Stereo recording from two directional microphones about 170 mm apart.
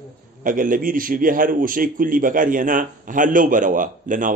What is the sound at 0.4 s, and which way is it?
A man's voice, 50° right (ahead or behind).